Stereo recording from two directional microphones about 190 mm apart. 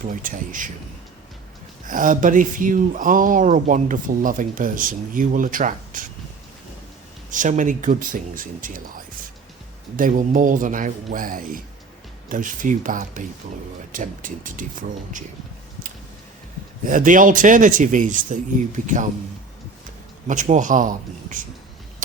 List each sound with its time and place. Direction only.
0.0 s speech: 45° right (ahead or behind)
1.9 s speech: 45° right (ahead or behind)
7.3 s speech: 40° right (ahead or behind)
16.8 s speech: 45° right (ahead or behind)
20.2 s a man's voice: 40° right (ahead or behind)